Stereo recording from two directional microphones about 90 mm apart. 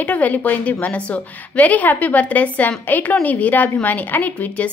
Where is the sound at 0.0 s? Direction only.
15° left (ahead or behind).